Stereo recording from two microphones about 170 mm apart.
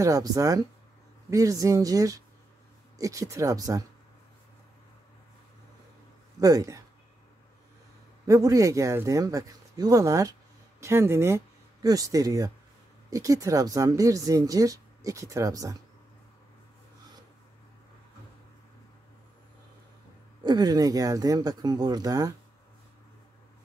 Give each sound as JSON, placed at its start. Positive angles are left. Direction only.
{"t": 0.0, "sound": "speech", "side_deg": -20}
{"t": 6.4, "sound": "speech", "side_deg": -20}
{"t": 8.3, "sound": "speech", "side_deg": -20}
{"t": 20.4, "sound": "speech", "side_deg": -25}